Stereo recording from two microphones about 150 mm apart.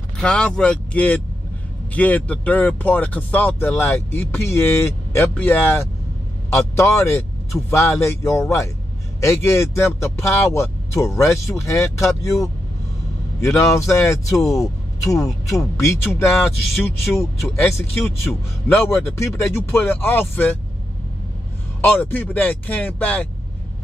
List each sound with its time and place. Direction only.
0.2 s speech: 5° left (ahead or behind); by 12.4 s 20° left (ahead or behind)
13.6 s speech: 20° left (ahead or behind)
21.8 s speech: 15° left (ahead or behind)